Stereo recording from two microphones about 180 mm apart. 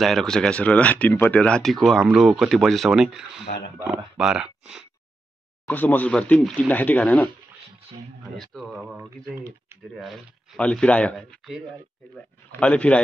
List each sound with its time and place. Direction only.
0.0 s speech: centre (ahead or behind)
5.7 s speech: 10° left (ahead or behind)
8.4 s speech: centre (ahead or behind)
9.9 s speech: centre (ahead or behind)